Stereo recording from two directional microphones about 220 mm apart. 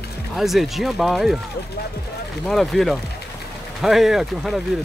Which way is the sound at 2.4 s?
Centre (ahead or behind).